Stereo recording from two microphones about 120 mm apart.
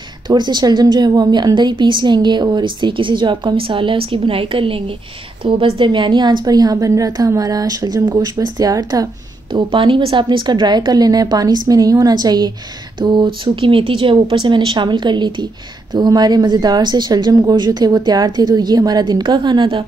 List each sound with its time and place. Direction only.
0.3 s a woman's voice: 40° right (ahead or behind)
9.5 s a woman's voice: 45° right (ahead or behind)